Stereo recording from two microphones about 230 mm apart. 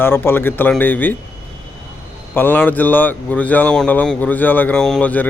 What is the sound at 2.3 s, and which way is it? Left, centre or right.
A man's voice, centre.